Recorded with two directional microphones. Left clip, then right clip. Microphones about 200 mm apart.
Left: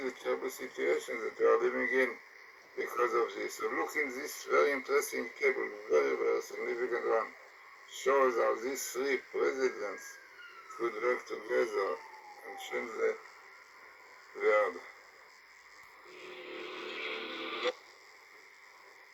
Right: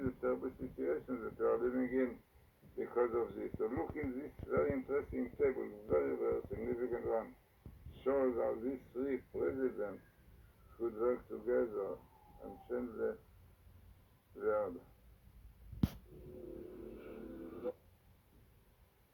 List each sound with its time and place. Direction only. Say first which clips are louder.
0.0 s a man's voice: left 3 dB; 20° left (ahead or behind)
14.3 s a man's voice: left 8 dB; 25° left (ahead or behind)
17.4 s radio: left 11 dB; 15° left (ahead or behind)